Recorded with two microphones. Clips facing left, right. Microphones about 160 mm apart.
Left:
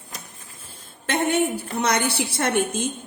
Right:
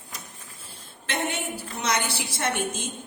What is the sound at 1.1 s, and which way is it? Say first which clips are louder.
A woman's voice: left 8 dB; 50° left (ahead or behind).